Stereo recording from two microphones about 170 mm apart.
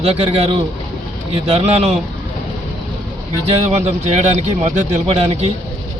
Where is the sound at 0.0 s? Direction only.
35° right (ahead or behind).